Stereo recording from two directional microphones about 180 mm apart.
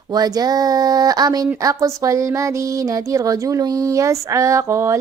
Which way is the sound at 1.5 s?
20° right (ahead or behind).